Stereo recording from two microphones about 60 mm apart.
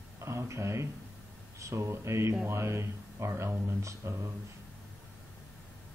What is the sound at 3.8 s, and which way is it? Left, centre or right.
Speech, right.